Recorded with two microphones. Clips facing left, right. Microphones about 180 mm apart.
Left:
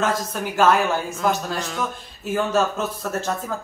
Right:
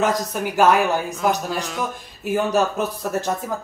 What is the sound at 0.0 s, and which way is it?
Speech, 15° right (ahead or behind).